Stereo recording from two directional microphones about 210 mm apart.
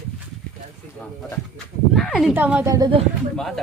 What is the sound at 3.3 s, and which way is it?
Rub, centre (ahead or behind).